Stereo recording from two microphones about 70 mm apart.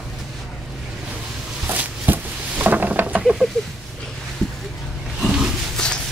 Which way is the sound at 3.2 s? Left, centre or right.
Centre.